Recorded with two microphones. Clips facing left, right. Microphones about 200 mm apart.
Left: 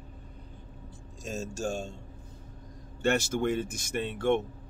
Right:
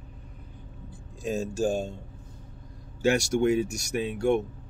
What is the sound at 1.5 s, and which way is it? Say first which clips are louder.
Speech: right 6 dB; 35° right (ahead or behind).